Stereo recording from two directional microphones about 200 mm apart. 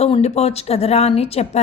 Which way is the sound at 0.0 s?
30° left (ahead or behind).